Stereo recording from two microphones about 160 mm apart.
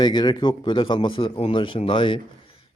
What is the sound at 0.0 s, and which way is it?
Speech, 25° left (ahead or behind).